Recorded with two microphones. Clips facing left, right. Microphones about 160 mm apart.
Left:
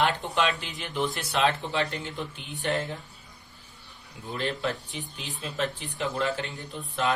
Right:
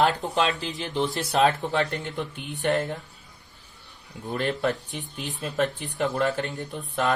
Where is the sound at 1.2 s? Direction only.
40° right (ahead or behind).